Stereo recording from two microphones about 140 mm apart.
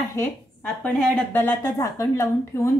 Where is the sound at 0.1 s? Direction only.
15° left (ahead or behind).